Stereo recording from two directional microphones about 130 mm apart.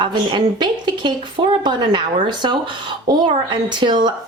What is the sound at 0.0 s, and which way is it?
A woman's voice, 35° right (ahead or behind).